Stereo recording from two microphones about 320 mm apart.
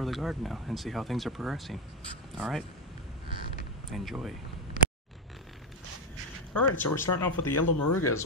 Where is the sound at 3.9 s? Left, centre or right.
Centre.